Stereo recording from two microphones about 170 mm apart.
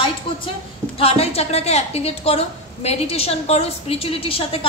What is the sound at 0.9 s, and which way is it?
A woman's voice, 35° left (ahead or behind).